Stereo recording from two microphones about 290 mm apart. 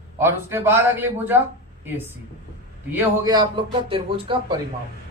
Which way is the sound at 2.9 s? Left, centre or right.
Centre.